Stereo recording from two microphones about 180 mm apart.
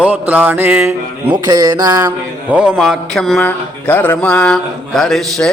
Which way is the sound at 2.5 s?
5° right (ahead or behind).